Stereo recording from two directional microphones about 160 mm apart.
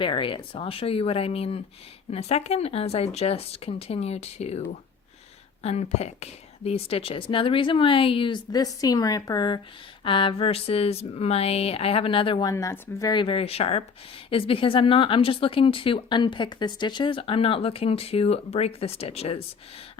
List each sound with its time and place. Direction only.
0.0 s speech: 35° left (ahead or behind)
5.6 s speech: 40° left (ahead or behind)
12.5 s speech: 20° left (ahead or behind); by 19.4 s 40° left (ahead or behind)